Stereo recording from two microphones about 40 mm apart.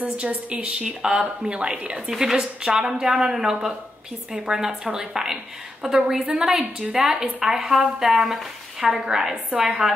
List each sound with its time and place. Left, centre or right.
0.0 s a woman's voice: right
2.0 s a woman's voice: centre
6.2 s a woman's voice: right
7.0 s a woman's voice: centre